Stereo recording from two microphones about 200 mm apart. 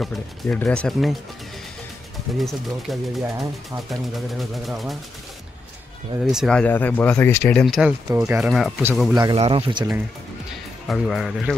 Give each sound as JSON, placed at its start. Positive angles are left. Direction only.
{"t": 0.0, "sound": "speech", "side_deg": 5}
{"t": 2.3, "sound": "speech", "side_deg": 0}
{"t": 3.3, "sound": "speech", "side_deg": -15}
{"t": 4.1, "sound": "speech", "side_deg": 0}
{"t": 6.2, "sound": "speech", "side_deg": 0}
{"t": 8.1, "sound": "speech", "side_deg": -15}
{"t": 8.4, "sound": "speech", "side_deg": 0}
{"t": 9.1, "sound": "speech", "side_deg": -20}
{"t": 10.9, "sound": "speech", "side_deg": 0}